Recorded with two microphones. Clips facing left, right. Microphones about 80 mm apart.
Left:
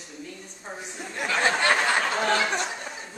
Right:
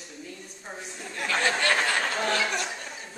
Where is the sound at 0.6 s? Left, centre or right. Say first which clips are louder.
Left 3 dB; centre.